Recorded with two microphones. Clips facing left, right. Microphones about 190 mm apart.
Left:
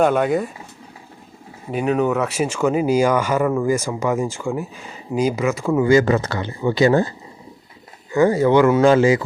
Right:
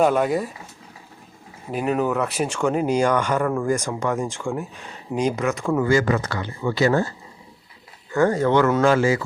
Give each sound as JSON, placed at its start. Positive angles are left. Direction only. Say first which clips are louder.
{"t": 0.0, "sound": "speech", "louder": "left 2 dB", "side_deg": 0}
{"t": 1.7, "sound": "speech", "louder": "left 3 dB", "side_deg": 0}
{"t": 5.8, "sound": "speech", "louder": "left 6 dB", "side_deg": 20}
{"t": 8.1, "sound": "speech", "louder": "left 4 dB", "side_deg": 10}